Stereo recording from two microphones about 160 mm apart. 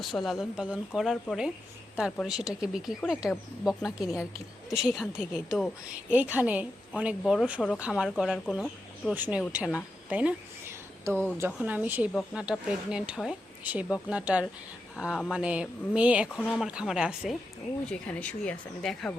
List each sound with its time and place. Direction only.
0.0 s speech: centre (ahead or behind)
2.5 s speech: 5° right (ahead or behind)
4.0 s a woman's voice: 20° left (ahead or behind)
4.7 s speech: centre (ahead or behind)
10.1 s a sound: 10° right (ahead or behind)
11.3 s speech: 10° right (ahead or behind)
16.3 s speech: 5° left (ahead or behind)
17.9 s speech: 10° left (ahead or behind)